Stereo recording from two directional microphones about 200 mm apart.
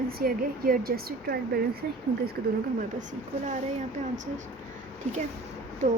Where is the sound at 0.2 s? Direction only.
45° right (ahead or behind).